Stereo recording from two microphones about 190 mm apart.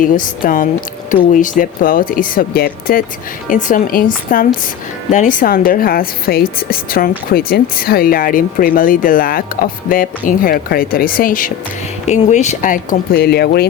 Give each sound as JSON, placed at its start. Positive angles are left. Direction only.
{"t": 0.0, "sound": "speech", "side_deg": 45}